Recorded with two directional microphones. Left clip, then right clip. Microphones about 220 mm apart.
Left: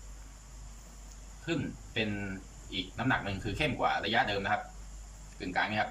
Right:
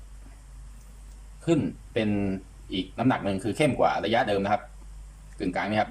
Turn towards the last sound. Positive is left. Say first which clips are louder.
# right 5 dB
turn(degrees=-30)  # may be behind; listen again after turning